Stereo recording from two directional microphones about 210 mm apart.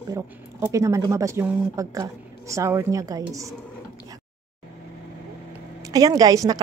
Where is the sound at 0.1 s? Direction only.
15° right (ahead or behind).